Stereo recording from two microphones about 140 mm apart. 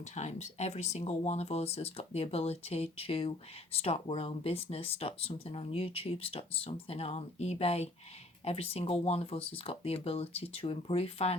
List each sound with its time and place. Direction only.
0.0 s speech: 55° left (ahead or behind)